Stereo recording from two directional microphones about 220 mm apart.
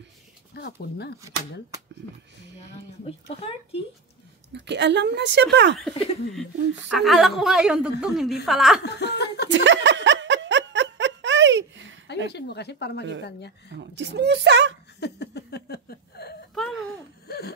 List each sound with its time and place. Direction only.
0.6 s speech: 50° left (ahead or behind)
3.3 s speech: 25° left (ahead or behind)
4.5 s speech: 50° right (ahead or behind)
6.9 s a woman's voice: centre (ahead or behind)
8.8 s speech: 50° left (ahead or behind)
9.5 s laughter: 55° right (ahead or behind)
12.3 s speech: 50° left (ahead or behind)
13.7 s speech: 50° right (ahead or behind)
15.0 s a sound: 50° left (ahead or behind)